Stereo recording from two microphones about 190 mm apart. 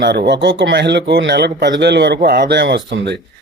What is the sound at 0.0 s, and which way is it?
Speech, 60° right (ahead or behind).